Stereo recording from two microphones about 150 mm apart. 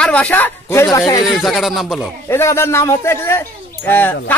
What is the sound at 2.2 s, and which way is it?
A man's voice, 15° left (ahead or behind).